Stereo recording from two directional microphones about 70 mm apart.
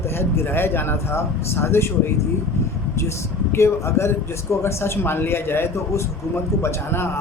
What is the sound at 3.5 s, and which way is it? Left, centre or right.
Speech, left.